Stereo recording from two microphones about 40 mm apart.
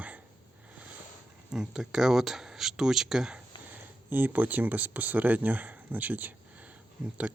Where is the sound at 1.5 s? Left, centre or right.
Centre.